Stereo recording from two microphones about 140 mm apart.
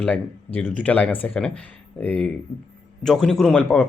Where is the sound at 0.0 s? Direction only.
10° left (ahead or behind).